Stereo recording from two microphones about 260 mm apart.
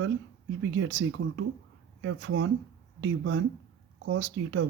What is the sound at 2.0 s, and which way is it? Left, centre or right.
Speech, right.